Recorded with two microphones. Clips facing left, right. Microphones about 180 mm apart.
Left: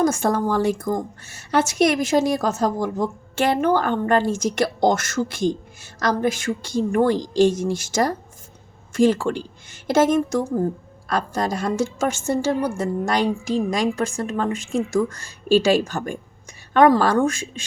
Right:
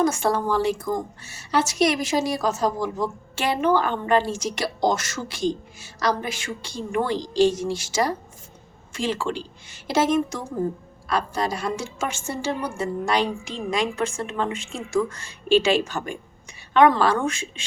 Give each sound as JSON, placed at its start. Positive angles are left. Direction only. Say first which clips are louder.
{"t": 0.0, "sound": "a woman's voice", "louder": "left 2 dB", "side_deg": 45}